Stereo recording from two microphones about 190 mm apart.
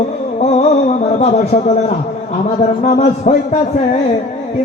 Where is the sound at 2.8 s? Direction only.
40° left (ahead or behind).